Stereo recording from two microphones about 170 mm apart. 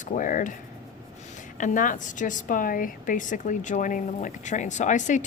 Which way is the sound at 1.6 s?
50° left (ahead or behind).